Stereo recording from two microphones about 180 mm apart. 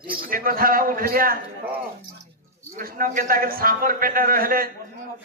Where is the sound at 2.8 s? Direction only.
50° right (ahead or behind).